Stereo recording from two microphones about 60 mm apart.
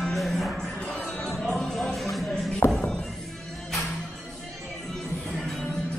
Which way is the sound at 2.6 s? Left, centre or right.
Left.